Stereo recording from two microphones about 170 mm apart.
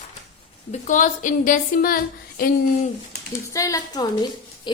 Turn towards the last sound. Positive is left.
turn(degrees=20)  # may be behind; listen again after turning